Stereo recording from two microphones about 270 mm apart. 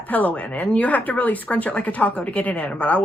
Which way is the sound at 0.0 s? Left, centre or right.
Centre.